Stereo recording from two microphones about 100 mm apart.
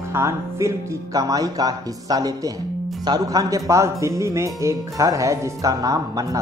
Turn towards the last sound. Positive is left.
turn(degrees=-35)  # may be behind; listen again after turning